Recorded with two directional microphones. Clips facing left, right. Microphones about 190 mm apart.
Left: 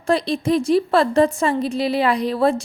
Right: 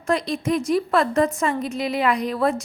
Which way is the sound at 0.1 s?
30° left (ahead or behind).